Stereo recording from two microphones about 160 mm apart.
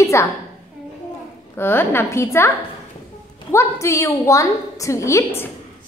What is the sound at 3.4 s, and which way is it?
A woman's voice, 15° left (ahead or behind).